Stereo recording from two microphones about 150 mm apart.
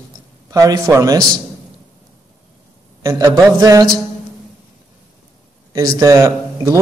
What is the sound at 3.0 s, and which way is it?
Speech, 20° right (ahead or behind).